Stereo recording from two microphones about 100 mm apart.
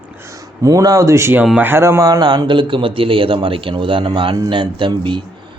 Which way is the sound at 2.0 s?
40° right (ahead or behind).